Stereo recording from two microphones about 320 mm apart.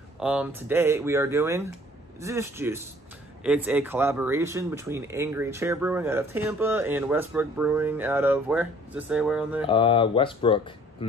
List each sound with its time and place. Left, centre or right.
0.2 s speech: centre
9.7 s speech: centre